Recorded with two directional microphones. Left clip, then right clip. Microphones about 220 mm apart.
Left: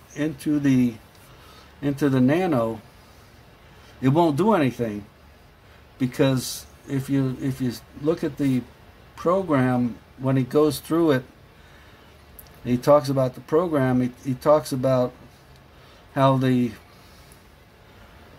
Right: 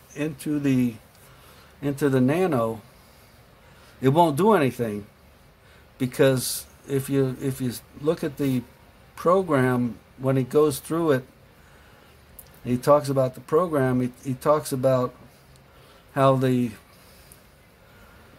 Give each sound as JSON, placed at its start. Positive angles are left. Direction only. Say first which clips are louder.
{"t": 0.1, "sound": "speech", "louder": "left 3 dB", "side_deg": -15}
{"t": 4.0, "sound": "speech", "louder": "right 1 dB", "side_deg": -25}
{"t": 5.9, "sound": "speech", "louder": "right 2 dB", "side_deg": -25}
{"t": 12.6, "sound": "speech", "louder": "left 2 dB", "side_deg": -15}
{"t": 16.1, "sound": "speech", "louder": "even", "side_deg": -15}